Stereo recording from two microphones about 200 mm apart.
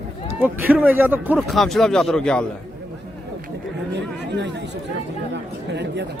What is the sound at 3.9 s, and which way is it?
Speech, 60° right (ahead or behind).